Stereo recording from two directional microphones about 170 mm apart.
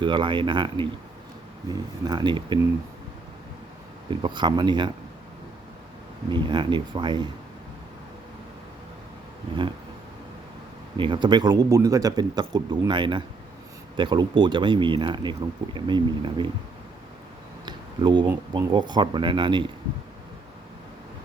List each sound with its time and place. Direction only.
0.0 s speech: 30° right (ahead or behind)
4.1 s speech: 30° right (ahead or behind)
6.3 s speech: 25° right (ahead or behind)
10.9 s speech: 30° right (ahead or behind)
17.7 s a sound: 25° right (ahead or behind)
18.5 s speech: 25° right (ahead or behind)